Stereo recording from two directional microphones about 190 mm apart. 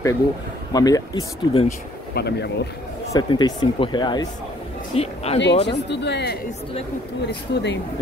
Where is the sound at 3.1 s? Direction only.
20° left (ahead or behind).